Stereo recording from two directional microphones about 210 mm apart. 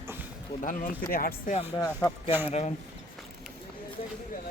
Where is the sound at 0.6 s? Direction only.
40° left (ahead or behind).